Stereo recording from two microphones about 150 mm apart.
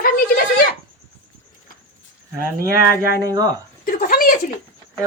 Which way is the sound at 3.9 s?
65° left (ahead or behind).